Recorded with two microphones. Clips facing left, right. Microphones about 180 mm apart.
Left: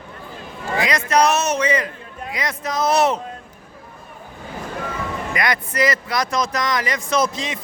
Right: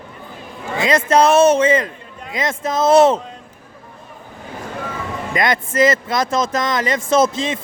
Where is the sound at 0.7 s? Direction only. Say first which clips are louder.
Right 4 dB; 25° right (ahead or behind).